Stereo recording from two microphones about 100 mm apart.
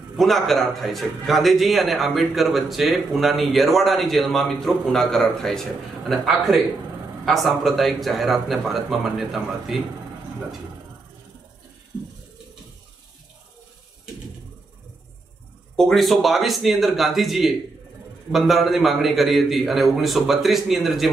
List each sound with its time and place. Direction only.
0.2 s a man's voice: centre (ahead or behind)
15.7 s a man's voice: 5° left (ahead or behind)